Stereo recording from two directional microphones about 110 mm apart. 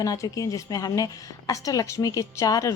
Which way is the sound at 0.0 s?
30° left (ahead or behind).